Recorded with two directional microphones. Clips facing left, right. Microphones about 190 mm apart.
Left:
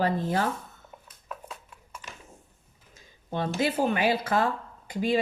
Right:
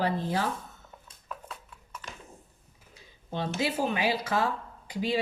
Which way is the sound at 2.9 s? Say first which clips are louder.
Left 3 dB; 50° left (ahead or behind).